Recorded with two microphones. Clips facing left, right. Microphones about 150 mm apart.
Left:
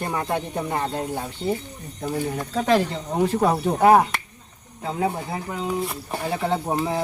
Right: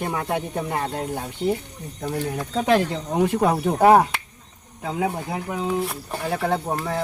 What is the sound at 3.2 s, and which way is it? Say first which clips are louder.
Speech: even; 15° right (ahead or behind).